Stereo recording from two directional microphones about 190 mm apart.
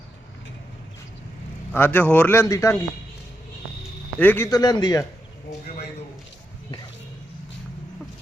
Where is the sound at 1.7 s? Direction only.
10° left (ahead or behind).